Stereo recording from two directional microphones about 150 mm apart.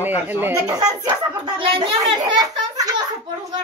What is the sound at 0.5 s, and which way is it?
Speech, 25° right (ahead or behind).